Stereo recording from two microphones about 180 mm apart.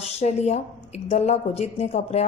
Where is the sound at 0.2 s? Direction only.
35° left (ahead or behind).